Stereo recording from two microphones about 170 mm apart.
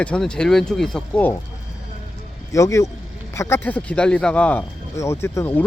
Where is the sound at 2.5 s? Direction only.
20° left (ahead or behind).